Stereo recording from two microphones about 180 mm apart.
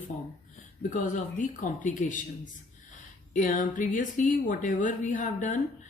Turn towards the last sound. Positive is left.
turn(degrees=45)  # may be behind; listen again after turning